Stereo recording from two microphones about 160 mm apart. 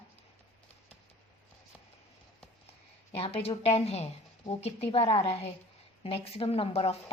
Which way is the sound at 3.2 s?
40° left (ahead or behind).